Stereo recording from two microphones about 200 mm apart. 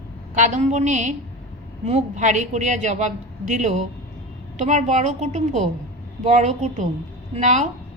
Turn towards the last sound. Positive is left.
turn(degrees=-35)  # may be behind; listen again after turning